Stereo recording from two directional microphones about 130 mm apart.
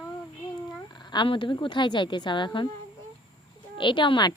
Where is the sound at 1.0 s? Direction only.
35° left (ahead or behind).